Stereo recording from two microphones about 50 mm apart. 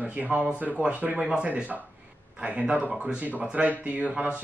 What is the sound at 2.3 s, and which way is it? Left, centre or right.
Speech, right.